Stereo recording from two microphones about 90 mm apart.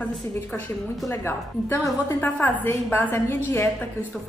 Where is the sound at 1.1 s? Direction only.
25° left (ahead or behind).